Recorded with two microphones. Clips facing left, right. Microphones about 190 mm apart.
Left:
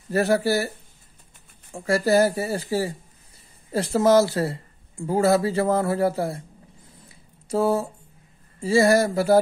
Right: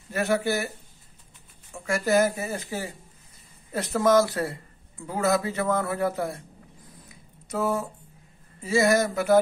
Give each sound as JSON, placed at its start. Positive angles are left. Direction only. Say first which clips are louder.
{"t": 0.1, "sound": "speech", "louder": "left 4 dB", "side_deg": 35}
{"t": 1.7, "sound": "speech", "louder": "left 4 dB", "side_deg": 35}
{"t": 7.4, "sound": "speech", "louder": "left 5 dB", "side_deg": 30}